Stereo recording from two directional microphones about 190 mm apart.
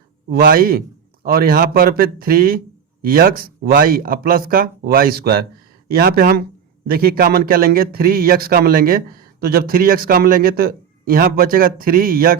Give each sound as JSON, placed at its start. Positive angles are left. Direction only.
{"t": 0.3, "sound": "a man's voice", "side_deg": -50}